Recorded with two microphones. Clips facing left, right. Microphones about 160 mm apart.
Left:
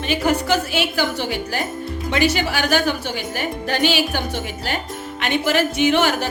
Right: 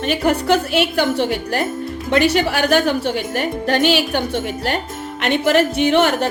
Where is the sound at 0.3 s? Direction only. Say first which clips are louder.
Right 3 dB; 60° right (ahead or behind).